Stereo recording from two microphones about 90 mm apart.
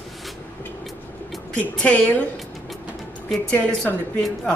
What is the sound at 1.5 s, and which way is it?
Speech, 15° left (ahead or behind).